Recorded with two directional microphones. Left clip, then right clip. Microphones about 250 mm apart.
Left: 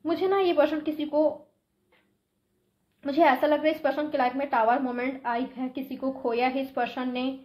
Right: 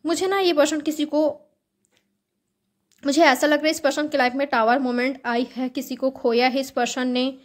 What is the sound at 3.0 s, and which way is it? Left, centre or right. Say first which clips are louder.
A woman's voice: right 4 dB; right.